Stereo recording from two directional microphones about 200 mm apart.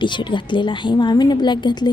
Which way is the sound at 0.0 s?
25° left (ahead or behind).